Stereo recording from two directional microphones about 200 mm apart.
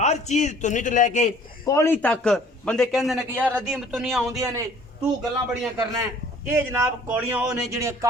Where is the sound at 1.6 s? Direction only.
15° left (ahead or behind).